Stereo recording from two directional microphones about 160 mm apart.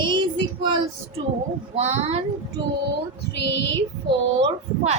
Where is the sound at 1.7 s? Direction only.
45° right (ahead or behind).